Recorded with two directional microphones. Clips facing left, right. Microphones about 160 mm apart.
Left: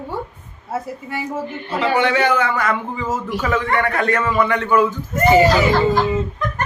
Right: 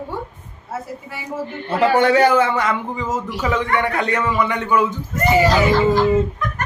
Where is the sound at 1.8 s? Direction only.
45° right (ahead or behind); by 4.8 s 15° right (ahead or behind).